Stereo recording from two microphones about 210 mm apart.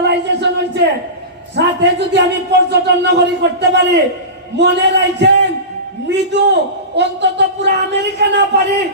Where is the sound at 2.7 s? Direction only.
50° right (ahead or behind).